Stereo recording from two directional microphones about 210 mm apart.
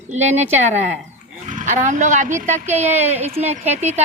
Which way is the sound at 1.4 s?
35° right (ahead or behind).